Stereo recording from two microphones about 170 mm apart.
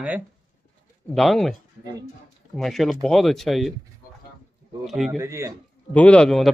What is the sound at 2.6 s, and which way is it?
Speech, centre (ahead or behind).